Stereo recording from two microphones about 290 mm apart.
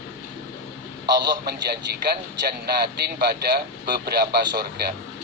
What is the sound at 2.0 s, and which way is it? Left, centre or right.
Speech, right.